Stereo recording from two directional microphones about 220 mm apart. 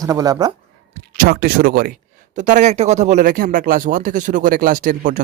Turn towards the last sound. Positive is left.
turn(degrees=-35)  # may be behind; listen again after turning